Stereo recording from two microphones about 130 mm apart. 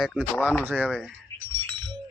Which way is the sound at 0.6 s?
15° right (ahead or behind).